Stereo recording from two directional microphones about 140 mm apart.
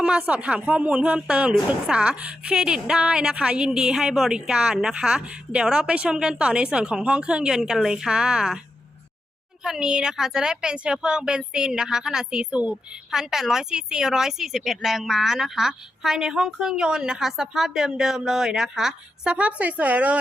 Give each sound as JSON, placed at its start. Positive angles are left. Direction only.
{"t": 0.0, "sound": "a woman's voice", "side_deg": -10}
{"t": 9.6, "sound": "a woman's voice", "side_deg": -5}